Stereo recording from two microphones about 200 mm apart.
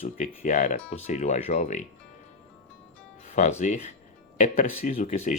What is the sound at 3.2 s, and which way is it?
Speech, 35° left (ahead or behind).